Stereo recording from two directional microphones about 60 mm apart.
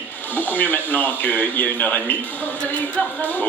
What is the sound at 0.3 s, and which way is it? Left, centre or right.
Speech, left.